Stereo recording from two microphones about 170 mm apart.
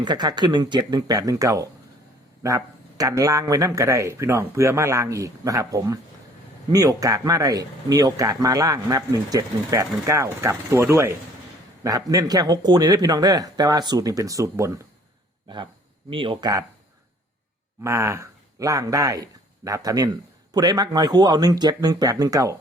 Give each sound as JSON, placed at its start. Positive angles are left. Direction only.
{"t": 0.0, "sound": "a man's voice", "side_deg": -25}
{"t": 16.0, "sound": "speech", "side_deg": -30}
{"t": 17.8, "sound": "speech", "side_deg": -15}